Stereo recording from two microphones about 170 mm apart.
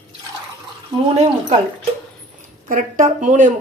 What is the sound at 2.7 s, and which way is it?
Speech, 50° right (ahead or behind).